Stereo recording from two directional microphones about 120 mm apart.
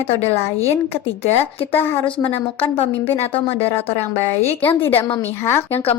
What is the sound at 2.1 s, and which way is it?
Speech, 50° left (ahead or behind).